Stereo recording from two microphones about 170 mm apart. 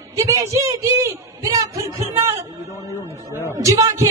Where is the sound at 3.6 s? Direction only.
20° right (ahead or behind).